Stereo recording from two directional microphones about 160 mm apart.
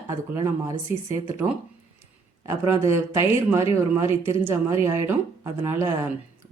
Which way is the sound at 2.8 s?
15° right (ahead or behind).